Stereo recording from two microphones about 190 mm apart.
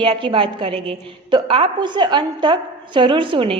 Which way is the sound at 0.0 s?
25° right (ahead or behind).